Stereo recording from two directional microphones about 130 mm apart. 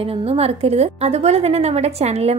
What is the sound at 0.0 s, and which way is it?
A woman's voice, 50° right (ahead or behind).